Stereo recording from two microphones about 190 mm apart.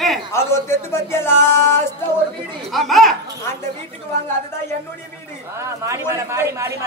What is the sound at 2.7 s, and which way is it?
Speech, centre (ahead or behind).